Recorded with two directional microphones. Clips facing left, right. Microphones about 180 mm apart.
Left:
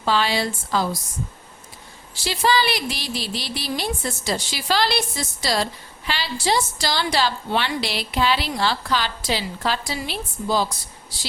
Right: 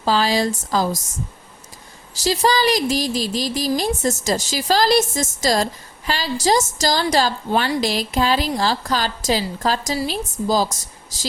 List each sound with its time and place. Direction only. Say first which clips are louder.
0.0 s a woman's voice: right 3 dB; 40° right (ahead or behind)
2.1 s a woman's voice: right 3 dB; 40° right (ahead or behind)